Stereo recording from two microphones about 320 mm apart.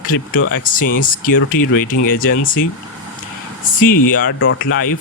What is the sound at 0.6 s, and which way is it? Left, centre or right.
Speech, left.